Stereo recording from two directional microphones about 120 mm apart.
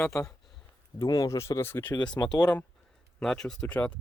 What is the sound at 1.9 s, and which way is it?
Speech, 30° left (ahead or behind).